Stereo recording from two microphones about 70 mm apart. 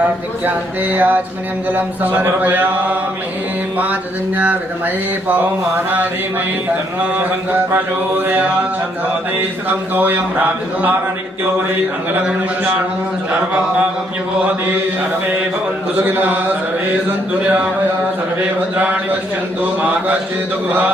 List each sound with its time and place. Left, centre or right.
0.4 s mantra: right
5.3 s mantra: right
7.2 s mantra: right
9.9 s mantra: right
16.0 s mantra: right